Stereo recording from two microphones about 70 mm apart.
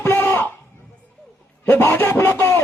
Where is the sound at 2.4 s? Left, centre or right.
Left.